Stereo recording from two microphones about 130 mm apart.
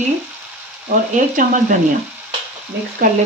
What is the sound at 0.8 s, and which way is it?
Speech, 90° right.